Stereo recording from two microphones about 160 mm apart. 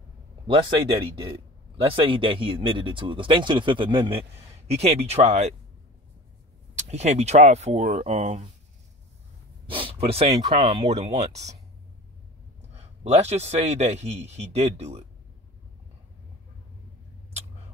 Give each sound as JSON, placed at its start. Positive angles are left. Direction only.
{"t": 1.2, "sound": "speech", "side_deg": -35}
{"t": 6.7, "sound": "a man's voice", "side_deg": -45}
{"t": 9.7, "sound": "a sound", "side_deg": -35}
{"t": 10.3, "sound": "a man's voice", "side_deg": -25}
{"t": 12.7, "sound": "a man's voice", "side_deg": -45}